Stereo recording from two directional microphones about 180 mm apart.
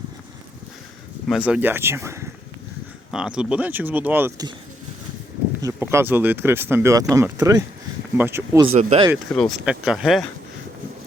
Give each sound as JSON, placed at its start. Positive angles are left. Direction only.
{"t": 1.5, "sound": "speech", "side_deg": -10}
{"t": 3.1, "sound": "speech", "side_deg": -5}
{"t": 5.6, "sound": "speech", "side_deg": -15}
{"t": 8.7, "sound": "speech", "side_deg": -35}
{"t": 9.3, "sound": "speech", "side_deg": 0}